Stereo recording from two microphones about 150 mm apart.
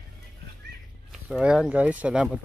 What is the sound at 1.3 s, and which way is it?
Speech, 5° right (ahead or behind).